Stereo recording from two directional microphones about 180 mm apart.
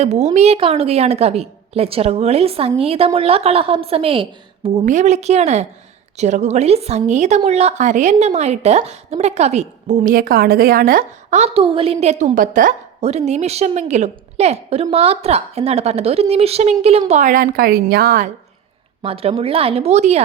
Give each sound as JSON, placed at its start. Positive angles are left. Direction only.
{"t": 0.0, "sound": "a woman's voice", "side_deg": -35}
{"t": 4.9, "sound": "a woman's voice", "side_deg": -40}
{"t": 11.0, "sound": "a woman's voice", "side_deg": -35}
{"t": 19.0, "sound": "a woman's voice", "side_deg": -30}